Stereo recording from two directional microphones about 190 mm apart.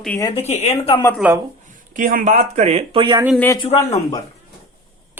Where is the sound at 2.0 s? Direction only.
45° right (ahead or behind); by 3.2 s 25° right (ahead or behind).